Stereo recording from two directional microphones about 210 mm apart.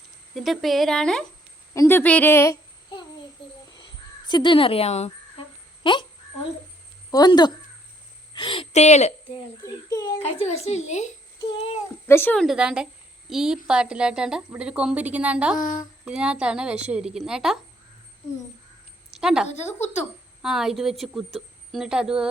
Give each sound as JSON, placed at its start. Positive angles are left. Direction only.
{"t": 0.3, "sound": "a woman's voice", "side_deg": 0}
{"t": 3.7, "sound": "crow", "side_deg": 20}
{"t": 5.8, "sound": "a child's voice", "side_deg": 25}
{"t": 7.1, "sound": "a woman's voice", "side_deg": 20}
{"t": 9.6, "sound": "a child's voice", "side_deg": 15}
{"t": 10.2, "sound": "a woman's voice", "side_deg": 30}
{"t": 12.0, "sound": "a woman's voice", "side_deg": 10}
{"t": 15.5, "sound": "a woman's voice", "side_deg": 40}
{"t": 16.0, "sound": "a woman's voice", "side_deg": -5}
{"t": 19.1, "sound": "a woman's voice", "side_deg": -5}
{"t": 19.5, "sound": "a woman's voice", "side_deg": 35}
{"t": 20.4, "sound": "a woman's voice", "side_deg": 0}